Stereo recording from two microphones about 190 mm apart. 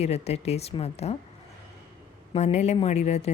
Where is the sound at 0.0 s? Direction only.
35° left (ahead or behind).